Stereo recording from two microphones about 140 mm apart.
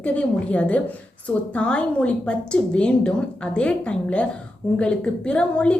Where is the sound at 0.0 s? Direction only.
10° left (ahead or behind).